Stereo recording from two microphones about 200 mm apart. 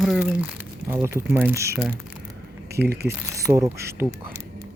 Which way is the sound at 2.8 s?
50° right (ahead or behind).